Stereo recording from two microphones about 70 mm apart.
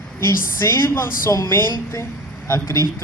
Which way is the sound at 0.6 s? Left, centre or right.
Left.